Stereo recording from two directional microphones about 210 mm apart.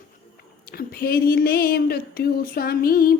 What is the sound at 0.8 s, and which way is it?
Music, 45° left (ahead or behind).